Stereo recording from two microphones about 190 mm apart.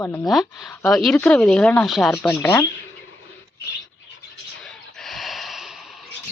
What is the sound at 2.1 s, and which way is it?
Speech, 10° left (ahead or behind).